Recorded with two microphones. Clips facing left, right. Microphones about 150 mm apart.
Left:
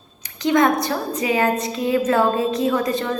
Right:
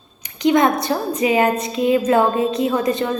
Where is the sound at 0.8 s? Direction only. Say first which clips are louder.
Right 3 dB; 20° right (ahead or behind).